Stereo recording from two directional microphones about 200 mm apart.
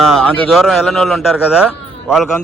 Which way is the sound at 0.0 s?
Centre (ahead or behind).